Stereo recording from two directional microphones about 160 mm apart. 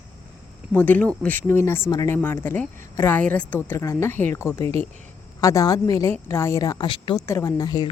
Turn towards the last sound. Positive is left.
turn(degrees=25)  # may be behind; listen again after turning